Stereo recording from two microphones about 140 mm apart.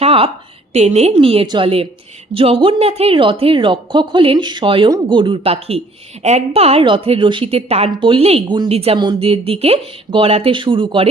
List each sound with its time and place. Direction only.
0.0 s a sound: 40° right (ahead or behind)
0.7 s a woman's voice: 50° right (ahead or behind); by 8.7 s 35° right (ahead or behind)
8.7 s speech: 45° right (ahead or behind)